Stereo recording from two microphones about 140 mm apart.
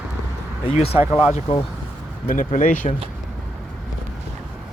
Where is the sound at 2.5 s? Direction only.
65° left (ahead or behind).